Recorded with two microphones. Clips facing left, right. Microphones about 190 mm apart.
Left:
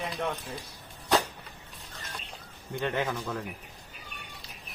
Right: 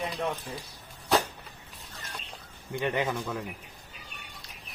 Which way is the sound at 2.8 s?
15° right (ahead or behind).